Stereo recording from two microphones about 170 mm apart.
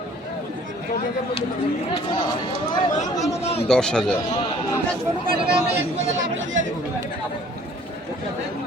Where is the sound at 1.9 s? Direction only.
30° left (ahead or behind).